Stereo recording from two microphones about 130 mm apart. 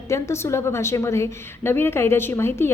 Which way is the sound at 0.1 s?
20° left (ahead or behind).